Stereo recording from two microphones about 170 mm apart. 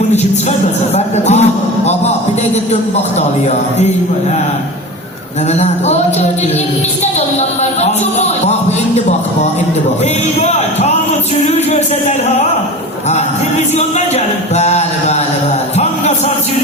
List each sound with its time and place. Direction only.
0.9 s a sound: 40° left (ahead or behind)
5.5 s speech: 40° left (ahead or behind)
7.0 s speech: 40° left (ahead or behind)
11.4 s speech: 40° left (ahead or behind)
14.5 s speech: 40° left (ahead or behind)
15.8 s music: 40° left (ahead or behind)